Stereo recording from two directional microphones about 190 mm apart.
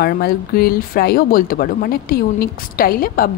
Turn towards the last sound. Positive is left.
turn(degrees=50)  # may be behind; listen again after turning